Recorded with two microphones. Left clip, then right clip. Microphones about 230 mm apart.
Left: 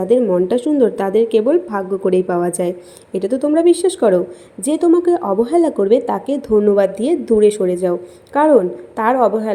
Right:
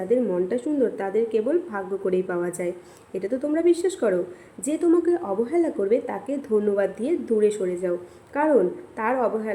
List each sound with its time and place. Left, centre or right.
0.1 s a woman's voice: left